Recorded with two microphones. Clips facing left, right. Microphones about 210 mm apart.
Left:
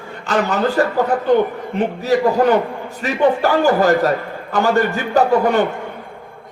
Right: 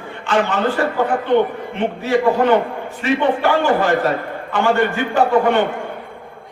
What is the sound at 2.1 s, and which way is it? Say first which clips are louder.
A man's voice: even; 40° left (ahead or behind).